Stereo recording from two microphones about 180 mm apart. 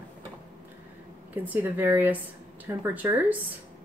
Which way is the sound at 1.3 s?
10° right (ahead or behind).